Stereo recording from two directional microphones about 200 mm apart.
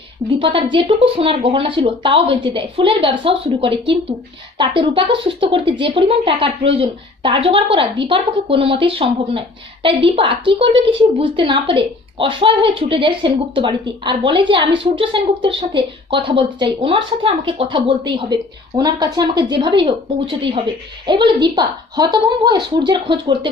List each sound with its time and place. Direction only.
0.3 s a woman's voice: 25° right (ahead or behind)